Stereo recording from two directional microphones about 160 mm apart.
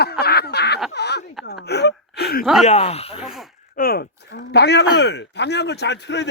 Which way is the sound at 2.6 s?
40° left (ahead or behind).